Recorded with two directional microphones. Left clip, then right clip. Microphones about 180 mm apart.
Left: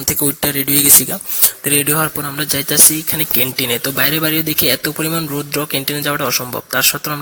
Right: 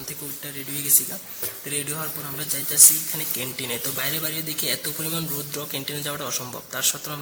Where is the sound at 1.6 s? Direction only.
40° left (ahead or behind).